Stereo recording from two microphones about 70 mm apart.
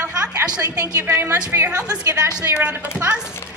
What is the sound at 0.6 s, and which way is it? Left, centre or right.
Speech, right.